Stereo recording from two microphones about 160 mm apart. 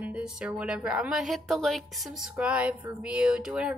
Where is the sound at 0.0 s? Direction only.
5° right (ahead or behind).